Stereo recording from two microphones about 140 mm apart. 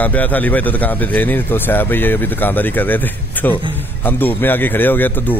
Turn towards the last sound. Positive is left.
turn(degrees=15)  # may be behind; listen again after turning